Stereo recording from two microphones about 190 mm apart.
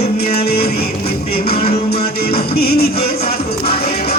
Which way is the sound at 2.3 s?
55° left (ahead or behind).